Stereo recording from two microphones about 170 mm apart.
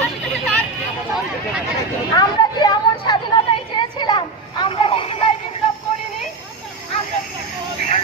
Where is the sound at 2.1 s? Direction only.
25° left (ahead or behind).